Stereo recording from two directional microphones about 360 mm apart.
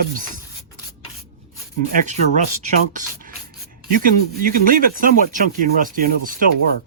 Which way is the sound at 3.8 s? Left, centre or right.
Right.